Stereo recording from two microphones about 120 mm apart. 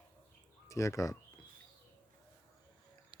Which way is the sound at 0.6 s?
25° left (ahead or behind).